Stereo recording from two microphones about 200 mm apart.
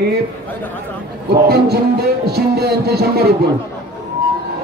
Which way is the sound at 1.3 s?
55° right (ahead or behind).